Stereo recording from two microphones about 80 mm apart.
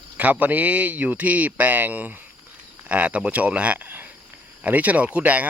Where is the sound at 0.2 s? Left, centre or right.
Centre.